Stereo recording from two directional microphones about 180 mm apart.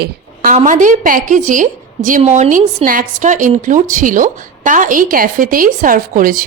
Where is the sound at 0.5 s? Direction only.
45° right (ahead or behind).